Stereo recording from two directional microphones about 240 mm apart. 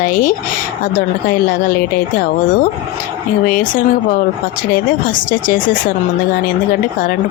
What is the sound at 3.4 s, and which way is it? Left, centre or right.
Speech, left.